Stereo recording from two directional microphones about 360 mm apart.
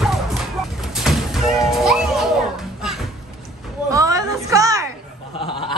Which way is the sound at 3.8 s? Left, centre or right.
Centre.